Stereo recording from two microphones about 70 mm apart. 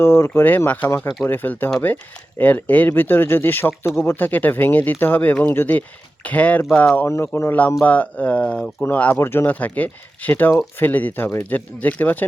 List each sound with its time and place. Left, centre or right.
0.0 s speech: left
4.1 s speech: left
7.0 s speech: left
7.9 s speech: left
8.8 s speech: left
9.1 s speech: left
9.5 s speech: left